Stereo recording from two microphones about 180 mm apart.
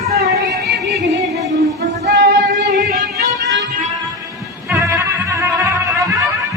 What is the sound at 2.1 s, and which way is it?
Female singing, 75° right (ahead or behind).